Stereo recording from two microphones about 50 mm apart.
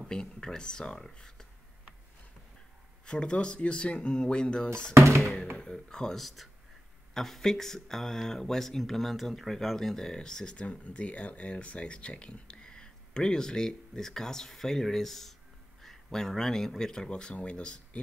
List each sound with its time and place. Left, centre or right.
0.0 s speech: centre
3.1 s speech: centre
4.9 s speech: right
5.6 s speech: centre
6.2 s speech: centre; by 18.0 s left